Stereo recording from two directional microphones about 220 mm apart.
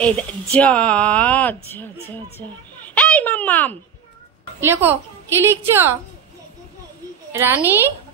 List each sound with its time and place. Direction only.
0.0 s a woman's voice: 5° left (ahead or behind)
4.6 s a woman's voice: 10° right (ahead or behind)
7.3 s a woman's voice: 10° right (ahead or behind)